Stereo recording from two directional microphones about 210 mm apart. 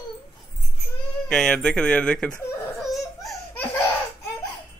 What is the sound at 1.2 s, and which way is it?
Baby cry, 5° left (ahead or behind).